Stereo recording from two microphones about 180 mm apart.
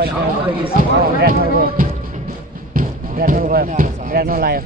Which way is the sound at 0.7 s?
55° right (ahead or behind).